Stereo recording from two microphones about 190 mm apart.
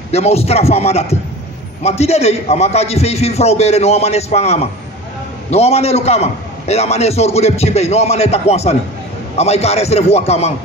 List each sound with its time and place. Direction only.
0.1 s a man's voice: 35° left (ahead or behind)